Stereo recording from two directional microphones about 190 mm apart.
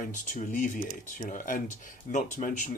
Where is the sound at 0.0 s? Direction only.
45° left (ahead or behind).